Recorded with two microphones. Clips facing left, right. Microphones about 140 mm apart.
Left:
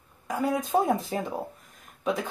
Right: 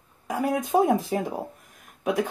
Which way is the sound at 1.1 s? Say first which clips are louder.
Right 3 dB; 10° right (ahead or behind).